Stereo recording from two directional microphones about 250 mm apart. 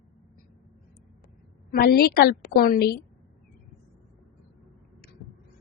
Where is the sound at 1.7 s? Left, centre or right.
Left.